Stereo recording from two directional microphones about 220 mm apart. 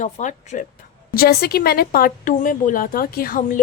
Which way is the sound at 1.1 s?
45° left (ahead or behind).